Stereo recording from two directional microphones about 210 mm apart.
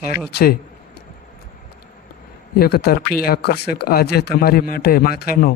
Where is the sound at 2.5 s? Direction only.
50° left (ahead or behind).